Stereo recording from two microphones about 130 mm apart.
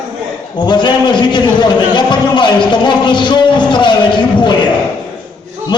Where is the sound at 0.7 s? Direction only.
35° left (ahead or behind).